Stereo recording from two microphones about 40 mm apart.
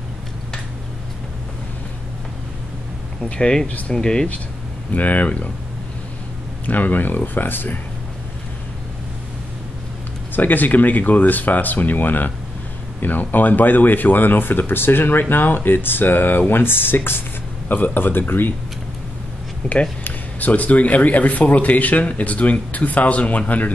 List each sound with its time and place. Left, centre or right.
3.3 s speech: left
4.9 s speech: left
6.6 s speech: left
10.3 s speech: left
17.6 s speech: left
19.6 s speech: centre
20.0 s speech: left